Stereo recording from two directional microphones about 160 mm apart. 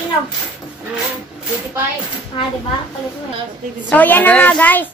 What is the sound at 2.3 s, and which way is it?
Speech, 35° left (ahead or behind).